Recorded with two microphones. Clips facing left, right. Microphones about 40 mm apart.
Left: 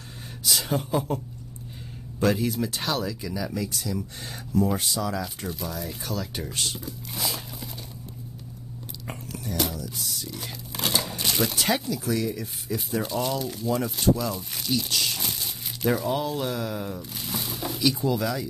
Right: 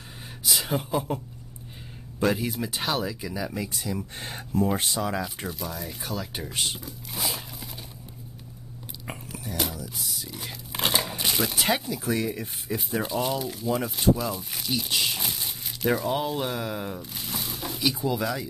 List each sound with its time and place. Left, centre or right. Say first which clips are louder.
0.4 s speech: left 1 dB; centre; by 5.2 s right
5.5 s speech: left 2 dB; centre
6.5 s speech: right 2 dB; right
6.8 s a sound: left 1 dB; centre
9.0 s whispering: left 1 dB; centre
10.7 s a sound: right 1 dB; right
11.0 s a sound: even; centre
11.5 s speech: even; centre
12.7 s speech: even; centre
14.9 s crumpling: right 1 dB; centre
15.3 s crumpling: even; centre
16.2 s speech: even; centre
17.1 s a sound: left 1 dB; centre
17.7 s speech: left 2 dB; centre